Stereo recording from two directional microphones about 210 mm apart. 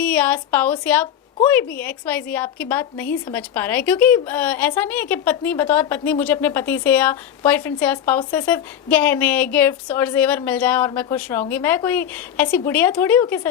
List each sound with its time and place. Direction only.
0.0 s speech: 5° left (ahead or behind)